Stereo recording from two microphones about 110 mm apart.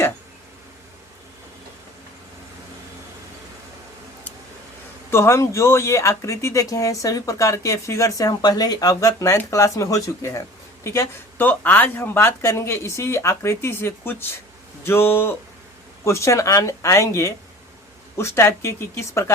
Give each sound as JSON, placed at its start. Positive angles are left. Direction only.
{"t": 5.1, "sound": "speech", "side_deg": 25}